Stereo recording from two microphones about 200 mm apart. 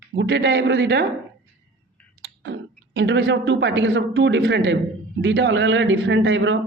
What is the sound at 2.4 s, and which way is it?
A man's voice, 65° right (ahead or behind).